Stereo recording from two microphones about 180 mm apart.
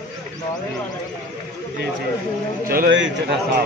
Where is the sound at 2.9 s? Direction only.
90° right.